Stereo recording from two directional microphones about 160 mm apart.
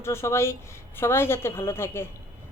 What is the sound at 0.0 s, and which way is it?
Speech, 15° left (ahead or behind).